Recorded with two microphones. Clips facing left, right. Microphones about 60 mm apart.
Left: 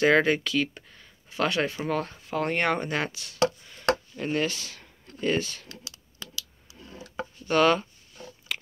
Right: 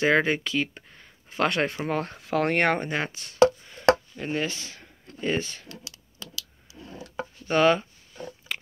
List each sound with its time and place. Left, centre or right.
0.0 s speech: centre; by 1.8 s right
1.8 s speech: right
2.1 s speech: right
2.8 s speech: centre
3.1 s speech: right
3.6 s chopping: centre
4.2 s speech: centre
4.5 s speech: right
7.4 s speech: centre